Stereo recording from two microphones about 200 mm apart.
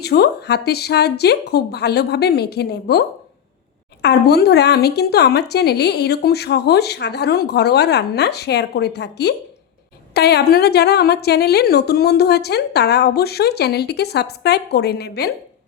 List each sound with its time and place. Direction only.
0.0 s a woman's voice: 55° left (ahead or behind)